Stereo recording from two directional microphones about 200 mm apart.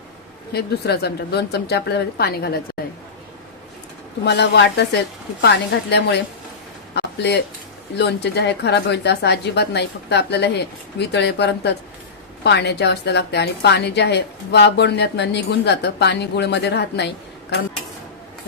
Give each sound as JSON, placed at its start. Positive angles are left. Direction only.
{"t": 0.5, "sound": "speech", "side_deg": 55}
{"t": 4.3, "sound": "a woman's voice", "side_deg": 60}